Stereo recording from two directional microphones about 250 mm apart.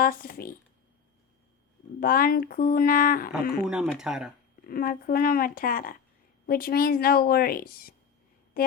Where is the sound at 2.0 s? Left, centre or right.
Left.